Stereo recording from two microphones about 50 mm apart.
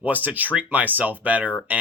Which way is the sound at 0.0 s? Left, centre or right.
Right.